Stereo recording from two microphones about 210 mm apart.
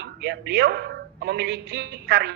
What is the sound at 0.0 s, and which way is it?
A woman's voice, 50° right (ahead or behind).